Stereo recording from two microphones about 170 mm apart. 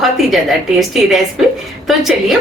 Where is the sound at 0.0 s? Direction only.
Centre (ahead or behind).